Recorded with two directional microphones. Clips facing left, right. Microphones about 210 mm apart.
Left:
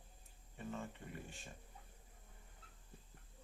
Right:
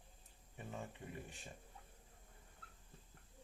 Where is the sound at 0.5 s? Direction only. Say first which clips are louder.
Left 3 dB; 15° right (ahead or behind).